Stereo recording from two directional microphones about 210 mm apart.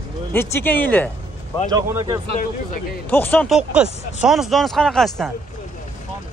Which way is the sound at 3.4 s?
5° right (ahead or behind).